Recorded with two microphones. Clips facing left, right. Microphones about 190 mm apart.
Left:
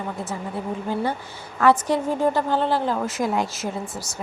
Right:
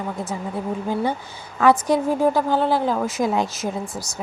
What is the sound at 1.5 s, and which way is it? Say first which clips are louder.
Speech: right 2 dB; 10° right (ahead or behind).